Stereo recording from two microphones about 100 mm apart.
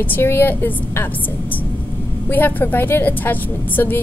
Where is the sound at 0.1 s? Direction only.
25° left (ahead or behind).